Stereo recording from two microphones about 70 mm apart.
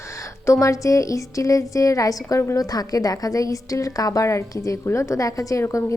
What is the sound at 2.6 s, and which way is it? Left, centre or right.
A woman's voice, left.